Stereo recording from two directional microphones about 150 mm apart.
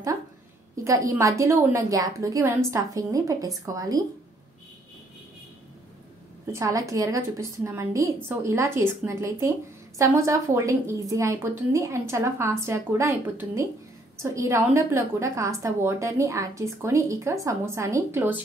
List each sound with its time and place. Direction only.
0.8 s a woman's voice: 20° right (ahead or behind)
6.4 s a woman's voice: 20° right (ahead or behind)